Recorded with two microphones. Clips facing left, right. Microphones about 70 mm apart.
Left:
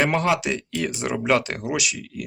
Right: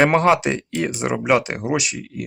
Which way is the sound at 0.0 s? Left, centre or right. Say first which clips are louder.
Right 6 dB; right.